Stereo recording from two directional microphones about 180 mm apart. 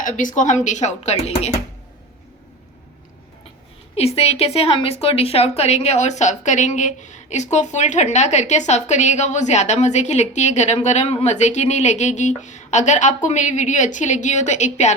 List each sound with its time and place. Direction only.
0.0 s speech: 45° left (ahead or behind)
3.9 s a woman's voice: 35° left (ahead or behind)